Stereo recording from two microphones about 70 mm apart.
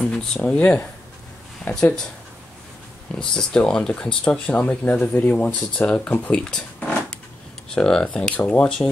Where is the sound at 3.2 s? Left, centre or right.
Centre.